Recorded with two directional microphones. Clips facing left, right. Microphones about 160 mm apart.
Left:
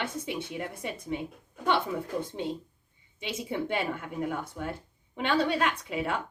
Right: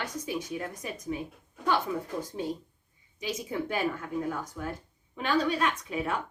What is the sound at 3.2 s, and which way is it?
Speech, 25° left (ahead or behind).